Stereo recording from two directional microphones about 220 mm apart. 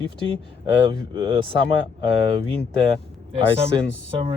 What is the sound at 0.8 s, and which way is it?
Speech, 20° right (ahead or behind).